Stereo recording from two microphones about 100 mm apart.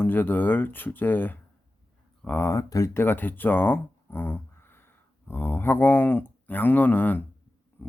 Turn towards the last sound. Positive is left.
turn(degrees=20)  # may be behind; listen again after turning